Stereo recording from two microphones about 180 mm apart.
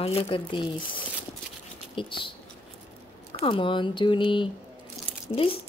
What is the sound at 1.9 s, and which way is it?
Speech, 30° left (ahead or behind).